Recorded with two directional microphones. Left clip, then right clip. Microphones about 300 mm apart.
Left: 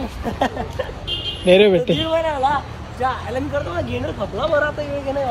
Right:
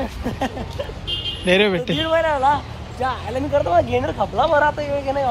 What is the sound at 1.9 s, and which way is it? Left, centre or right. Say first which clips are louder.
Speech: right 1 dB; centre.